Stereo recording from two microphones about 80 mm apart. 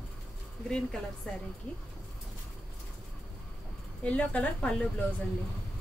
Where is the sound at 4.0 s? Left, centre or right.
Centre.